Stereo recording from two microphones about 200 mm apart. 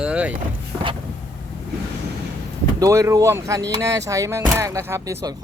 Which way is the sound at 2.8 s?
15° right (ahead or behind).